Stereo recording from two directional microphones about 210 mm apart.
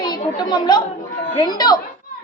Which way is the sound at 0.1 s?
20° left (ahead or behind).